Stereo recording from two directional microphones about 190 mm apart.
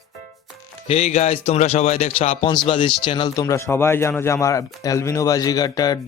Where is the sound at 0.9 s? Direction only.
35° left (ahead or behind).